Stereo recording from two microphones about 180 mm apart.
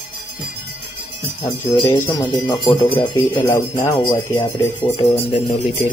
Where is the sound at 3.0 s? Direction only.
15° left (ahead or behind).